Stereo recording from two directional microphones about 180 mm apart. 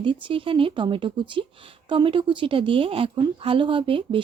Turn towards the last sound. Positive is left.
turn(degrees=-30)  # may be behind; listen again after turning